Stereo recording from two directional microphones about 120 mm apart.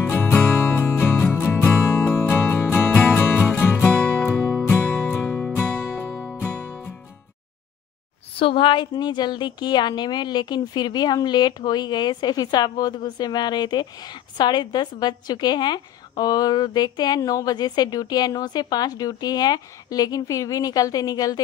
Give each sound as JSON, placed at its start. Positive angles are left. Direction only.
{"t": 0.0, "sound": "music", "side_deg": 15}
{"t": 8.4, "sound": "a woman's voice", "side_deg": 45}